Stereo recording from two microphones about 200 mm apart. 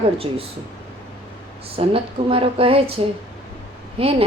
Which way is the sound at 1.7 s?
30° right (ahead or behind).